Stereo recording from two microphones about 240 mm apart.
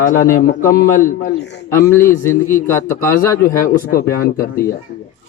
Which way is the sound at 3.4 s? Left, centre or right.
Left.